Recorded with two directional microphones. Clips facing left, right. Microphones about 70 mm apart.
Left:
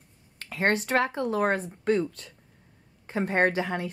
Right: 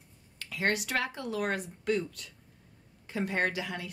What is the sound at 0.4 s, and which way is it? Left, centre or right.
Speech, left.